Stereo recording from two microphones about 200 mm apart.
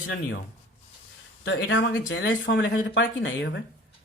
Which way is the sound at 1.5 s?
75° left (ahead or behind).